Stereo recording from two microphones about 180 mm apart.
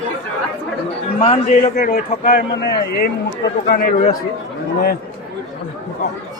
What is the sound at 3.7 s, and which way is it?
Speech, 55° left (ahead or behind).